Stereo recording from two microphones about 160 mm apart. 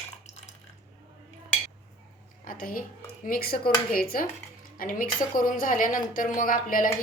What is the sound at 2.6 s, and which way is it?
A woman's voice, 60° left (ahead or behind).